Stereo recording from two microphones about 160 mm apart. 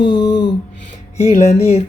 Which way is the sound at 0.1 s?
25° left (ahead or behind).